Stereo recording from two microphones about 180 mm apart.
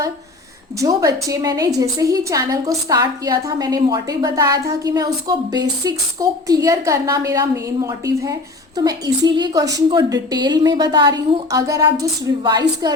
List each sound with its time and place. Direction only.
0.8 s a woman's voice: 20° right (ahead or behind)